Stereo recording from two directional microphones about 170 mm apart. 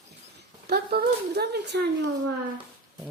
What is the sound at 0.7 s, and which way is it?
Speech, 65° right (ahead or behind).